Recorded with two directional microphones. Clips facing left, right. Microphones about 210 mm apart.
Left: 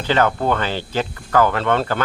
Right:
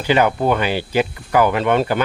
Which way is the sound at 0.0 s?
15° right (ahead or behind).